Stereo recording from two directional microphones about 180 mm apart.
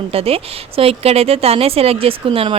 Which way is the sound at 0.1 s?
35° right (ahead or behind).